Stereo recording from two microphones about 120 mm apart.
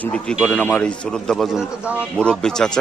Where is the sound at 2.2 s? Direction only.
5° left (ahead or behind).